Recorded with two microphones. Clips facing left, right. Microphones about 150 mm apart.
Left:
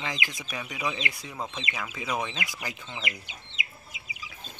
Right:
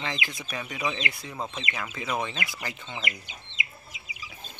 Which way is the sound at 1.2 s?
5° right (ahead or behind).